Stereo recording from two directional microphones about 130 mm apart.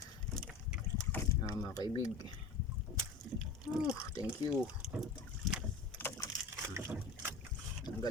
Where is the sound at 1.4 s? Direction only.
25° left (ahead or behind).